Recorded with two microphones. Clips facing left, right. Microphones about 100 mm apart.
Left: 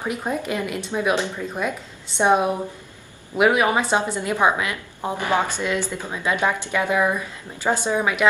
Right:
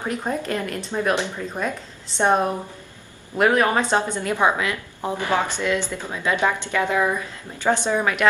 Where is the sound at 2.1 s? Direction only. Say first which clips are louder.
Left 1 dB; 5° left (ahead or behind).